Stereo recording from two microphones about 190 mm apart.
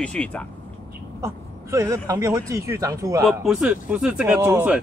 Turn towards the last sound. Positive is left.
turn(degrees=-10)  # may be behind; listen again after turning